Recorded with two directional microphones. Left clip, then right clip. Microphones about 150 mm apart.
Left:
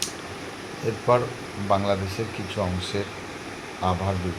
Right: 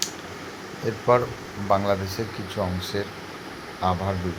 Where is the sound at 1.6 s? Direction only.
20° right (ahead or behind).